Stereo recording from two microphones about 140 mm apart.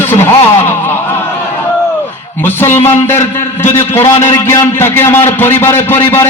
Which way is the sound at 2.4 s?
15° left (ahead or behind).